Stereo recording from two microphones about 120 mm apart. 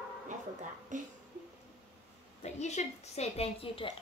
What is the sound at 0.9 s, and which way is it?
Speech, 90° right.